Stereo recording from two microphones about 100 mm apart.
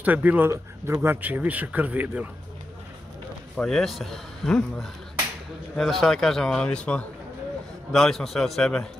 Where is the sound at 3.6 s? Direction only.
5° left (ahead or behind).